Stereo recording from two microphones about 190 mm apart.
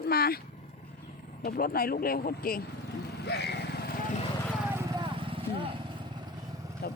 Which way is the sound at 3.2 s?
60° left (ahead or behind).